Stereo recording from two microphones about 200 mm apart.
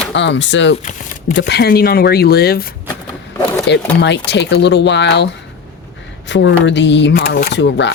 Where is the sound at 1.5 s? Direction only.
55° left (ahead or behind).